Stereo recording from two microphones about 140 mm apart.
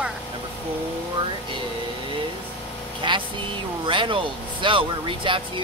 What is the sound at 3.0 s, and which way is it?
Speech, 35° right (ahead or behind).